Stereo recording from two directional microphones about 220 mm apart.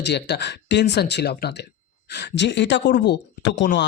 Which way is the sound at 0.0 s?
50° left (ahead or behind).